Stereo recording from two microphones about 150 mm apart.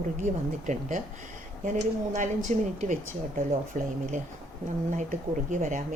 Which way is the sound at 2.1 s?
55° right (ahead or behind).